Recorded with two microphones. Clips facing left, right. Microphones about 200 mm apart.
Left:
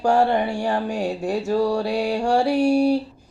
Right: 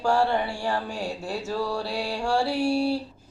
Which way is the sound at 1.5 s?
40° left (ahead or behind).